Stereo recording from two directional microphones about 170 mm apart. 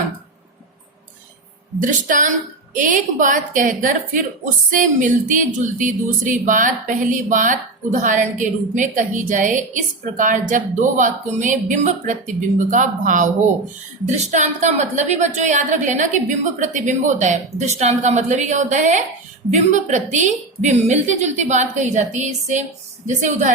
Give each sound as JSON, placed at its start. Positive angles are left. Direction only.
{"t": 1.8, "sound": "a woman's voice", "side_deg": -50}